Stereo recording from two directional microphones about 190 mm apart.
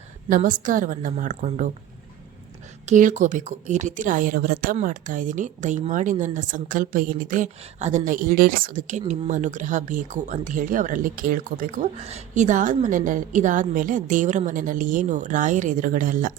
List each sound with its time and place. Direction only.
0.3 s speech: 45° right (ahead or behind)
2.8 s speech: 40° right (ahead or behind)